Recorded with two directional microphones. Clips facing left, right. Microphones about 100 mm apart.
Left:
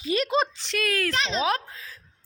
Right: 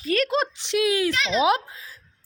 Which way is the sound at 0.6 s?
15° right (ahead or behind).